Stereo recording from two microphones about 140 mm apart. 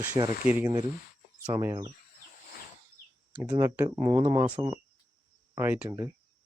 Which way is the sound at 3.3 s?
10° right (ahead or behind).